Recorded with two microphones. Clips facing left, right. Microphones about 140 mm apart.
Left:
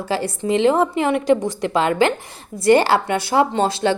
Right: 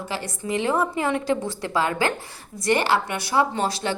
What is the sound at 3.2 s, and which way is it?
Speech, 25° left (ahead or behind).